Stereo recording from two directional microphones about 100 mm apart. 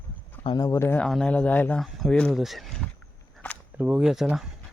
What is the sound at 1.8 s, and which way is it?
Speech, centre (ahead or behind).